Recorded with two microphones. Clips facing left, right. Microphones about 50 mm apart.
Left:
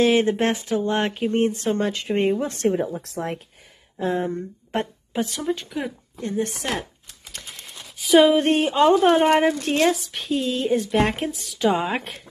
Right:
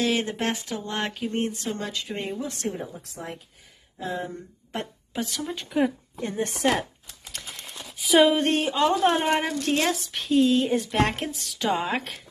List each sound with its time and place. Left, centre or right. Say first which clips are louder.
0.0 s speech: left 7 dB; left
2.7 s a woman's voice: left 10 dB; left
4.0 s speech: left 7 dB; left
5.1 s speech: left 5 dB; centre
5.4 s a woman's voice: left 6 dB; centre
6.1 s a woman's voice: left 3 dB; right
7.3 s a sound: even; centre
8.5 s speech: left 5 dB; centre
9.8 s a woman's voice: left 5 dB; centre